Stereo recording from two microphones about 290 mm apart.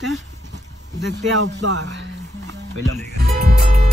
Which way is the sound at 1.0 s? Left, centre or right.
Right.